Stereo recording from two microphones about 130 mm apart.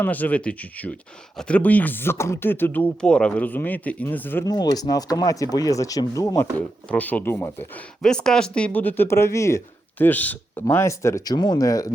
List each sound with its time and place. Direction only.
0.0 s speech: 10° left (ahead or behind)
4.4 s speech: 30° left (ahead or behind)
6.8 s speech: 10° left (ahead or behind)
8.0 s speech: 5° left (ahead or behind); by 11.9 s 25° left (ahead or behind)